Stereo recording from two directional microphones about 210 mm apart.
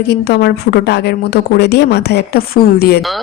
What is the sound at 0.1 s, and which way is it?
A woman's voice, 50° left (ahead or behind).